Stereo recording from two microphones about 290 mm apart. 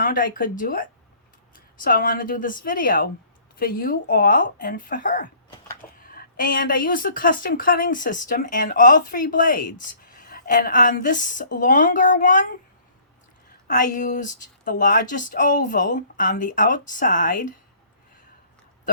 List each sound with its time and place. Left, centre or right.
0.0 s speech: left
13.7 s speech: left